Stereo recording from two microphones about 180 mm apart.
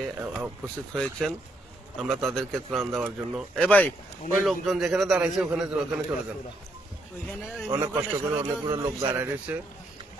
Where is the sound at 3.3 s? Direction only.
5° left (ahead or behind).